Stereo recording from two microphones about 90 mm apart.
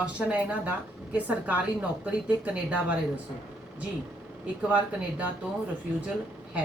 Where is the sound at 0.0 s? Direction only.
15° right (ahead or behind).